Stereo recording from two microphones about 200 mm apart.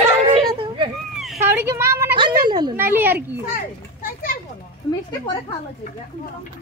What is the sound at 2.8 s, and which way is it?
Speech, 10° right (ahead or behind).